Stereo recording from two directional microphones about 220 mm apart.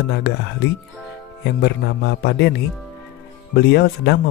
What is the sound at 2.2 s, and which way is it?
Speech, 50° left (ahead or behind).